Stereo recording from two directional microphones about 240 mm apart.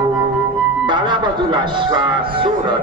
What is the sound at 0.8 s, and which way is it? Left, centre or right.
Speech, centre.